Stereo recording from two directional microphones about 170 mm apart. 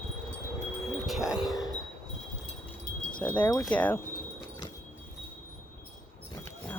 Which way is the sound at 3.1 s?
10° left (ahead or behind).